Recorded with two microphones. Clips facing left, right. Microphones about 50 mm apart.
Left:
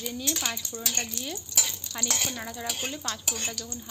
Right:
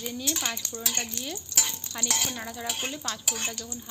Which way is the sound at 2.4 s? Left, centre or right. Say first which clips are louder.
Even; centre.